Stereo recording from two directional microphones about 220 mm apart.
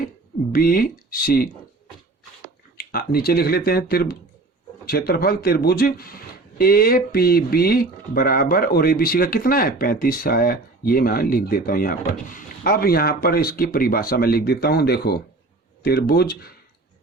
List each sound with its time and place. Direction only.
0.5 s speech: 40° left (ahead or behind)
2.7 s speech: 45° left (ahead or behind)